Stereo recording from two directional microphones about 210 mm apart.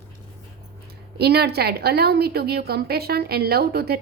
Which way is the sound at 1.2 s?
50° right (ahead or behind).